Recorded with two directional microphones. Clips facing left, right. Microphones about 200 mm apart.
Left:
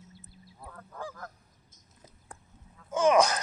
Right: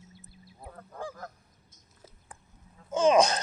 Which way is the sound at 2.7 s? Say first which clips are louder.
Right 1 dB; 20° right (ahead or behind).